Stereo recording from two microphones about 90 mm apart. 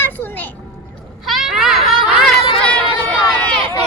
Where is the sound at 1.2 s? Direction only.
5° right (ahead or behind).